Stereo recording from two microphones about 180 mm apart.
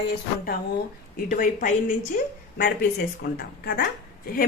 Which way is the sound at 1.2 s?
50° left (ahead or behind).